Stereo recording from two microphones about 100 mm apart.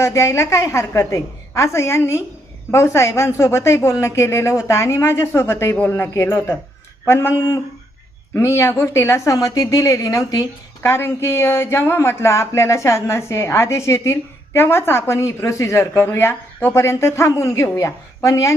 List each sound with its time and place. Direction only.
0.0 s speech: 30° left (ahead or behind)